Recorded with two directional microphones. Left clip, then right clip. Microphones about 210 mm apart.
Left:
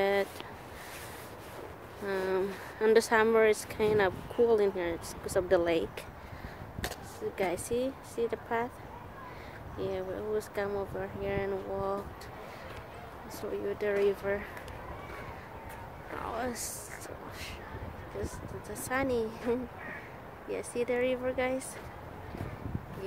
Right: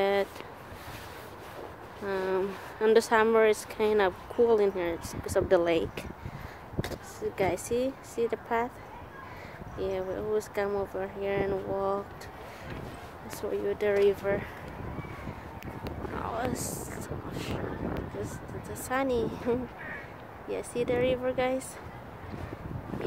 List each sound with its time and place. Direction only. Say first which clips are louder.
0.0 s a sound: right 2 dB; 10° right (ahead or behind)
2.0 s speech: right 2 dB; 10° right (ahead or behind)
7.2 s speech: right 3 dB; 20° right (ahead or behind)
9.8 s speech: right 3 dB; 20° right (ahead or behind)
13.4 s speech: right 4 dB; 30° right (ahead or behind)
16.2 s a sound: right 2 dB; 10° right (ahead or behind)
17.3 s vehicle: right 6 dB; 10° right (ahead or behind)
18.2 s speech: right 1 dB; 10° right (ahead or behind)
20.4 s speech: right 2 dB; 15° right (ahead or behind)